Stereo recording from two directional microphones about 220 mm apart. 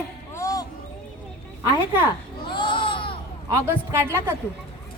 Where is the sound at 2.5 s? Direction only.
20° left (ahead or behind).